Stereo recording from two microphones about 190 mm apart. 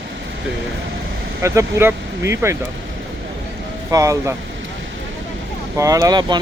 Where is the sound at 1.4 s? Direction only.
15° right (ahead or behind).